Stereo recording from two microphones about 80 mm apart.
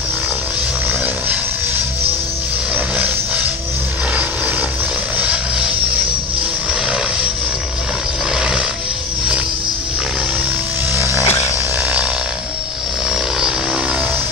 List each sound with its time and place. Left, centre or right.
2.7 s a sound: centre
4.1 s vehicle: centre
5.1 s music: centre
6.7 s music: centre
8.4 s music: centre
11.0 s a sound: right